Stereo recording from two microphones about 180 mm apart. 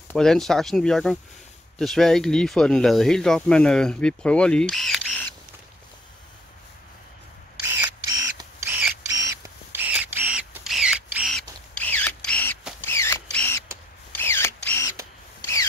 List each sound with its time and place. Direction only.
0.1 s speech: 5° left (ahead or behind)
7.6 s a sound: 20° right (ahead or behind); by 13.5 s 15° left (ahead or behind)
14.1 s camera: 15° left (ahead or behind)